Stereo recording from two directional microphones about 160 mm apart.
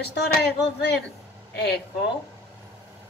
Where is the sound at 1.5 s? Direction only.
90° left.